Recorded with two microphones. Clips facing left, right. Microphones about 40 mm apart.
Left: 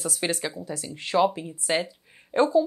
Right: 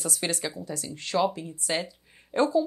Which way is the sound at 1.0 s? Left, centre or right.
Centre.